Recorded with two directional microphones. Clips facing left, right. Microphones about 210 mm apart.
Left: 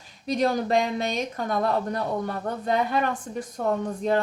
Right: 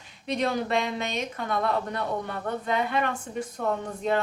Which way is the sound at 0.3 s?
35° left (ahead or behind).